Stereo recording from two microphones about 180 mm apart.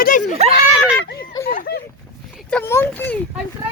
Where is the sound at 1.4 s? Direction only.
55° left (ahead or behind).